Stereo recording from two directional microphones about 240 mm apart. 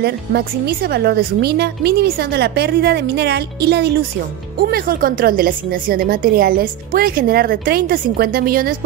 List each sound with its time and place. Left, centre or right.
0.0 s a woman's voice: right